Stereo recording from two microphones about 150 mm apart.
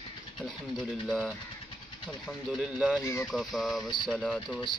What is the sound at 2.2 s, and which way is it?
Speech, 5° right (ahead or behind).